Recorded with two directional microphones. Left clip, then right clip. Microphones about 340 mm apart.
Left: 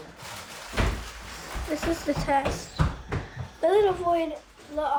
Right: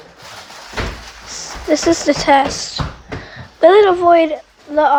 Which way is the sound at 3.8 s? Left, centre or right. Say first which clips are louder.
Right 14 dB; right.